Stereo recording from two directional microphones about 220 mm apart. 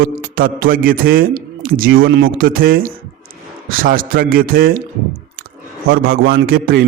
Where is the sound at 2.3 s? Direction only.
40° right (ahead or behind).